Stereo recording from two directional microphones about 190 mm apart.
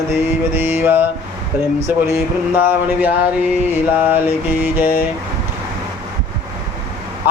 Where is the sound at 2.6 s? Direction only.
10° right (ahead or behind).